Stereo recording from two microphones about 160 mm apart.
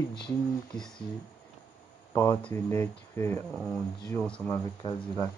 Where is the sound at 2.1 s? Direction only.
15° left (ahead or behind).